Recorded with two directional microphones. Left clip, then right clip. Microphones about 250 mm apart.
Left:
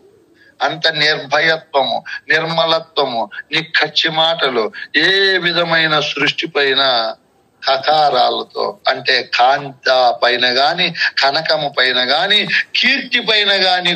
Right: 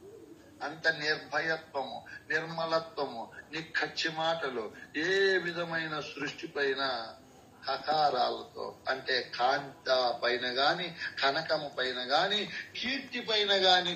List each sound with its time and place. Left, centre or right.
0.6 s a man's voice: left